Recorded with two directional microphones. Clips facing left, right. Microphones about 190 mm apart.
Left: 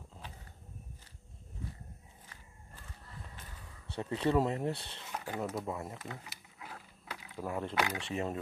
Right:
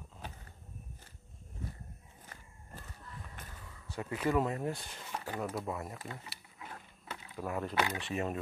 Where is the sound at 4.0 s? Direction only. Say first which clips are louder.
Left 2 dB; 25° left (ahead or behind).